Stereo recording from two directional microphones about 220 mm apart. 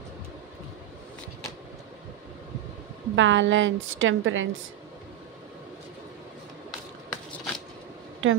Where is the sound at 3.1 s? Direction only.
55° right (ahead or behind).